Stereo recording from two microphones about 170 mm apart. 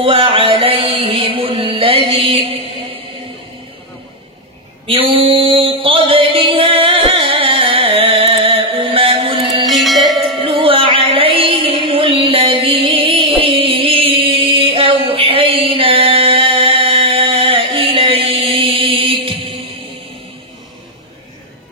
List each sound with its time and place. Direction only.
0.0 s music: 30° right (ahead or behind)
4.8 s mantra: 30° right (ahead or behind)
9.4 s music: centre (ahead or behind)
10.4 s music: 30° right (ahead or behind)